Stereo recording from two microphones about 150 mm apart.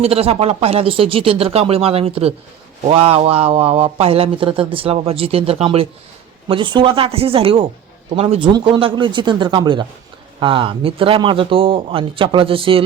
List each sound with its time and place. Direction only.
0.0 s a man's voice: 40° right (ahead or behind)